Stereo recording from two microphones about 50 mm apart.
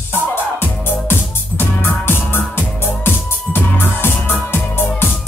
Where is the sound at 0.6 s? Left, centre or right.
Left.